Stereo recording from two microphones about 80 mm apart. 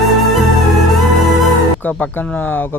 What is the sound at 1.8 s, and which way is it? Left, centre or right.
Speech, left.